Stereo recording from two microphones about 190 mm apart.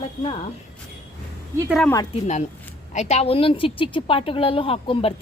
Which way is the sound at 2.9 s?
35° left (ahead or behind).